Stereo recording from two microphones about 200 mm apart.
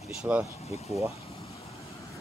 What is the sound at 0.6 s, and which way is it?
Speech, 30° left (ahead or behind).